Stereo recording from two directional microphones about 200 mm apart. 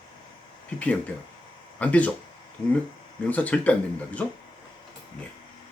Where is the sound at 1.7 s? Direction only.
5° left (ahead or behind).